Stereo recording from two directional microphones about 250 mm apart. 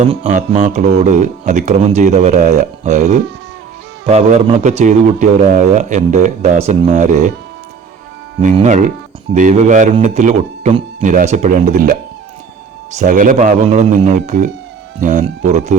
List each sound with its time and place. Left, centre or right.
0.0 s speech: right
8.4 s speech: right